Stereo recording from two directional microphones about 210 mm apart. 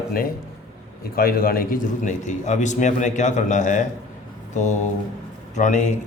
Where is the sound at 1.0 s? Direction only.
45° left (ahead or behind).